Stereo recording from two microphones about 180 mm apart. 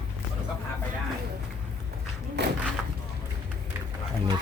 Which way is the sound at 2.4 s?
65° right (ahead or behind).